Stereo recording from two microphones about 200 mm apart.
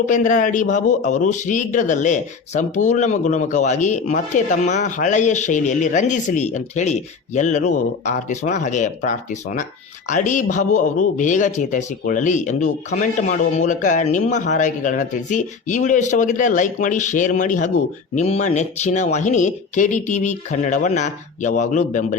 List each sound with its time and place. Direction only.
0.1 s a man's voice: 40° left (ahead or behind)